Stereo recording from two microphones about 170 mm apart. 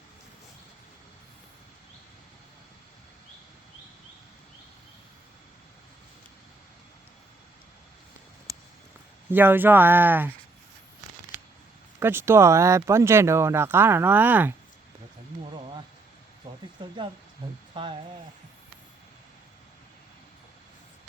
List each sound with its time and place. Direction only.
9.3 s speech: 10° right (ahead or behind)
11.9 s speech: 15° right (ahead or behind)
16.4 s a sound: 25° right (ahead or behind)
17.4 s speech: 30° right (ahead or behind)